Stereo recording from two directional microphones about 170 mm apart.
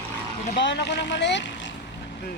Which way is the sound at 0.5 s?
85° left.